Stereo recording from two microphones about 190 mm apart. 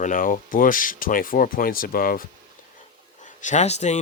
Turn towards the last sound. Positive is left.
turn(degrees=35)  # may be behind; listen again after turning